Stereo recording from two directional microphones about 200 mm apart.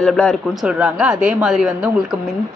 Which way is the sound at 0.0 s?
5° left (ahead or behind).